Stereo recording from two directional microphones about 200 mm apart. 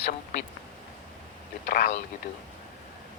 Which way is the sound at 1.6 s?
50° left (ahead or behind).